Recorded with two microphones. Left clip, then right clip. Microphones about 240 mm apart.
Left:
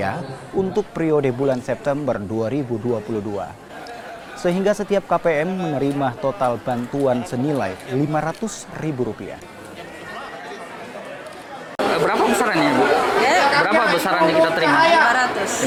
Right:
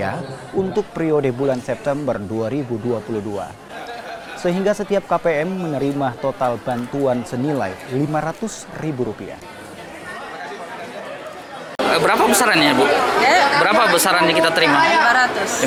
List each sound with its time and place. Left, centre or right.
0.7 s speech: centre
4.4 s speech: centre
11.9 s chatter: centre
13.3 s chatter: centre
13.6 s a woman's voice: centre